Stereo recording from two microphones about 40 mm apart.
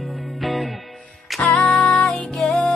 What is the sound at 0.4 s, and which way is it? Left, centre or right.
Music, centre.